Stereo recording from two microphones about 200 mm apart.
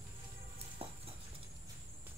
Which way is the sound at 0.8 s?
30° right (ahead or behind).